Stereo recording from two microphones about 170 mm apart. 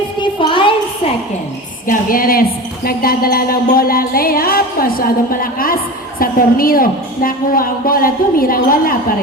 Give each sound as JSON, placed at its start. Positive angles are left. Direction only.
{"t": 0.2, "sound": "music", "side_deg": 30}
{"t": 1.9, "sound": "a woman's voice", "side_deg": 55}